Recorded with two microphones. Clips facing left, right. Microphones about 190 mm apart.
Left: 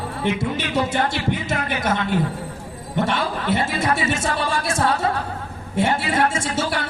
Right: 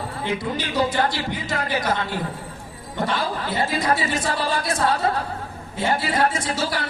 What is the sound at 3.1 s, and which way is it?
A woman's voice, 25° left (ahead or behind).